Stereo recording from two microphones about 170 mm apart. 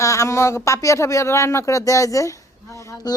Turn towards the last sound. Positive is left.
turn(degrees=20)  # may be behind; listen again after turning